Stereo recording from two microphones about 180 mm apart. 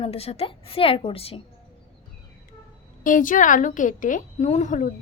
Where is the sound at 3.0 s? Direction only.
45° left (ahead or behind).